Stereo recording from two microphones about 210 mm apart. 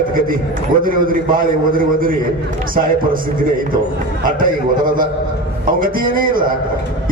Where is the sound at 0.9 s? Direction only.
40° right (ahead or behind).